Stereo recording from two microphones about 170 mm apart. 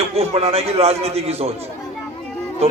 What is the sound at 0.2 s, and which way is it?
A man's voice, 35° right (ahead or behind).